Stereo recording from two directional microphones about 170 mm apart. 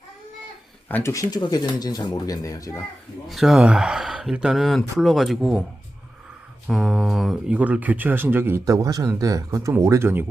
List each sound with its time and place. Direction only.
0.9 s speech: 15° left (ahead or behind)
3.2 s speech: centre (ahead or behind)
6.7 s speech: centre (ahead or behind)